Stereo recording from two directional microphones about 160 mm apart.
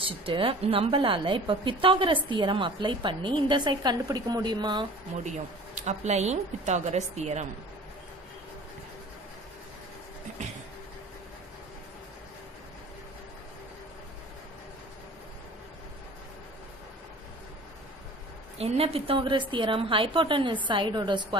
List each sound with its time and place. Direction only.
0.0 s a woman's voice: 35° right (ahead or behind)
5.8 s a woman's voice: 45° right (ahead or behind)
18.6 s a woman's voice: 40° right (ahead or behind)